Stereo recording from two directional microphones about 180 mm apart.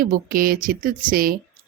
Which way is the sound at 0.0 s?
50° right (ahead or behind).